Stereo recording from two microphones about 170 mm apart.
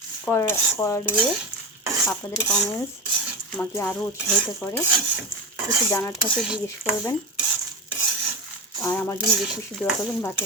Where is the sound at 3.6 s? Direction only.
15° left (ahead or behind).